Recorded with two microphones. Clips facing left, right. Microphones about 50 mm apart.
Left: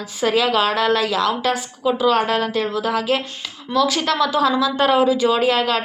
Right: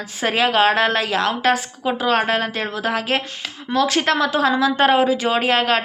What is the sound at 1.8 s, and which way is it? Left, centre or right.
A woman's voice, right.